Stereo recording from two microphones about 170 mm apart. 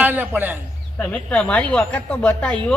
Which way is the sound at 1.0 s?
5° left (ahead or behind).